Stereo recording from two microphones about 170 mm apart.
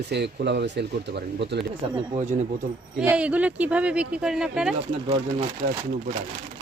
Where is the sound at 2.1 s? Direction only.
45° right (ahead or behind).